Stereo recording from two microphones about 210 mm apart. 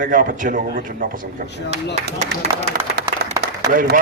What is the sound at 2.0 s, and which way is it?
A man's voice, 50° right (ahead or behind).